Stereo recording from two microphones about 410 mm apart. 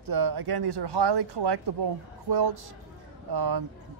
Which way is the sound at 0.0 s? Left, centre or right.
Right.